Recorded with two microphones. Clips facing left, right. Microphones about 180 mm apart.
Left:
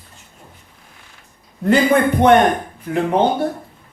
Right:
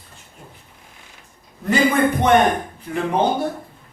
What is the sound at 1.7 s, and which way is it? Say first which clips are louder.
Speech: left 3 dB; 55° left (ahead or behind).